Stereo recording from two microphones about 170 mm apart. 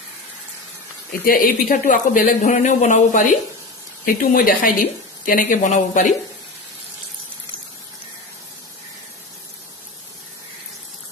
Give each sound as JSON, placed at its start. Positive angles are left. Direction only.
{"t": 1.1, "sound": "speech", "side_deg": 60}